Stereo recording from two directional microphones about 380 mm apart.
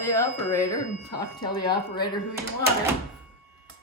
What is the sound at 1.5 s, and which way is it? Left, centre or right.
Speech, centre.